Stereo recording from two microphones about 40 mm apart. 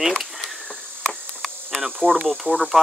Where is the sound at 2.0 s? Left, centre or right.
Right.